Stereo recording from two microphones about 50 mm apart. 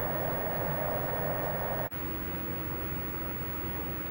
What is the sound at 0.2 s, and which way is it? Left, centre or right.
Vehicle, centre.